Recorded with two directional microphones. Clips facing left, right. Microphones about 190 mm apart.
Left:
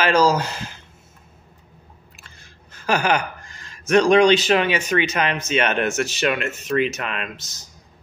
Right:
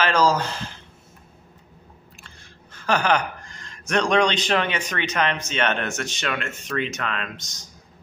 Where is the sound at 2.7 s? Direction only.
10° left (ahead or behind).